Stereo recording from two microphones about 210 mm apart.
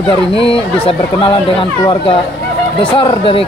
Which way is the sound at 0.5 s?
25° left (ahead or behind).